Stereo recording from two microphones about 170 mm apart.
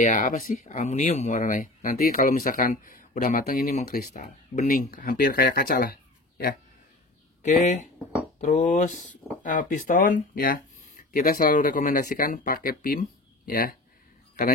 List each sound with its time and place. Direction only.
0.0 s speech: 50° left (ahead or behind)
7.4 s speech: 45° left (ahead or behind)